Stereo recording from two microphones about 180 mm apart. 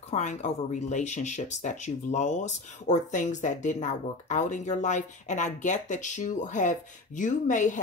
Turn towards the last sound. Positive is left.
turn(degrees=45)  # may be behind; listen again after turning